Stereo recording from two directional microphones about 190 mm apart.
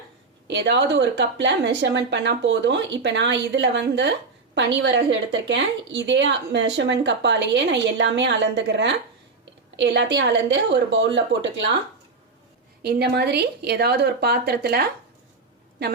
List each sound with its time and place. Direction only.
0.4 s a woman's voice: 65° right (ahead or behind)
12.8 s speech: 60° right (ahead or behind)